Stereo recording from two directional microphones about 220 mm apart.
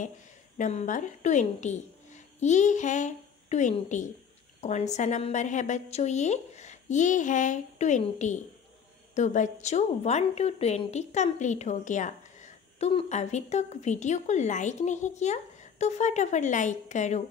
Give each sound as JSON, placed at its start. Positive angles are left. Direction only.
{"t": 0.6, "sound": "a woman's voice", "side_deg": 35}